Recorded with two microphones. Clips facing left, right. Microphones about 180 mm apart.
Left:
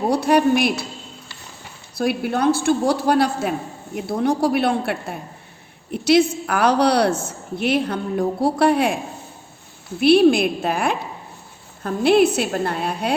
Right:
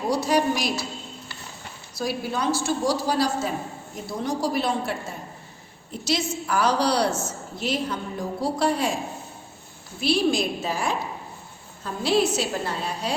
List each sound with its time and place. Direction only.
0.1 s a woman's voice: 60° left (ahead or behind)
2.0 s a woman's voice: 60° left (ahead or behind)
10.0 s a woman's voice: 60° left (ahead or behind)